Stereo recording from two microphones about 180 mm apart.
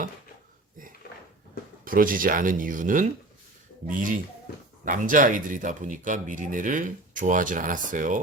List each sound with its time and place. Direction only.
1.8 s speech: 50° right (ahead or behind)